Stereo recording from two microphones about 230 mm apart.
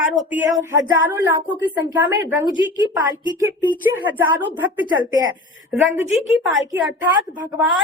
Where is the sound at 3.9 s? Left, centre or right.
Centre.